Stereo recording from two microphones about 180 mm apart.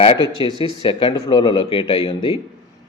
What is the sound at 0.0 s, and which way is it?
A man's voice, 30° left (ahead or behind).